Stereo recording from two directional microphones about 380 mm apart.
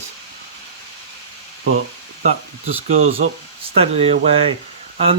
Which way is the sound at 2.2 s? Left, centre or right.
Centre.